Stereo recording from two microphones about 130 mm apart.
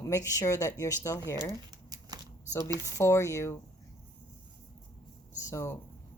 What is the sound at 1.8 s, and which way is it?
Shuffling cards, 30° right (ahead or behind).